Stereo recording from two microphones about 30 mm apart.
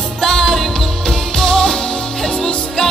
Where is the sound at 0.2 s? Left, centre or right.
Centre.